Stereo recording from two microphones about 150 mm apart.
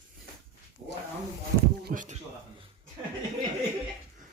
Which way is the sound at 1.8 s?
60° right (ahead or behind).